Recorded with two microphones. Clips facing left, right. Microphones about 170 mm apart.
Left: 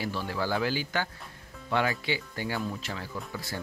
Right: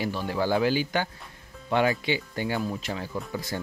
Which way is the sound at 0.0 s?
15° right (ahead or behind).